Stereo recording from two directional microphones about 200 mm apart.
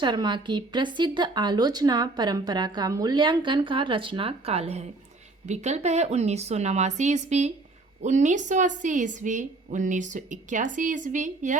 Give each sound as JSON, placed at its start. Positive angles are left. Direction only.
{"t": 0.0, "sound": "a woman's voice", "side_deg": -20}